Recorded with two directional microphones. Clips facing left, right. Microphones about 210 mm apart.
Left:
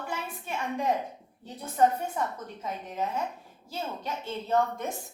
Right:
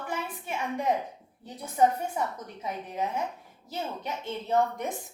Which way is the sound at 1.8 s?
10° right (ahead or behind).